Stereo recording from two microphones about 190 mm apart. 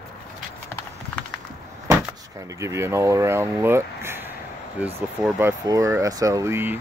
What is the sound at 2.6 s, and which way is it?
Speech, 15° right (ahead or behind).